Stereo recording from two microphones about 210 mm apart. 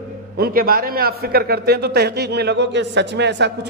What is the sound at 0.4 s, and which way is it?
A man's voice, 45° right (ahead or behind).